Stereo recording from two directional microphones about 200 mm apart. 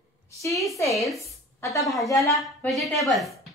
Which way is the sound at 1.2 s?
15° left (ahead or behind).